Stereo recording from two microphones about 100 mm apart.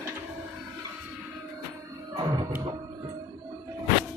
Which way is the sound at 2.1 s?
45° right (ahead or behind).